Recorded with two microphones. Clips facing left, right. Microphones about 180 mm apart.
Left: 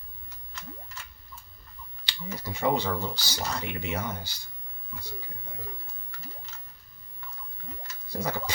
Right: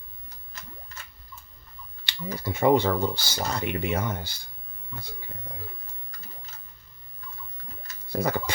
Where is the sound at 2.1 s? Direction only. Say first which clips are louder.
Right 5 dB; 55° right (ahead or behind).